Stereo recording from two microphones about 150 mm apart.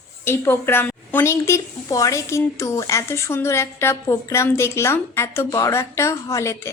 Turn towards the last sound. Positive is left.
turn(degrees=20)  # may be behind; listen again after turning